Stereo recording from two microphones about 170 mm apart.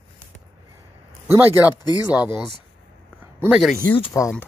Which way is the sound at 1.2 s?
10° right (ahead or behind).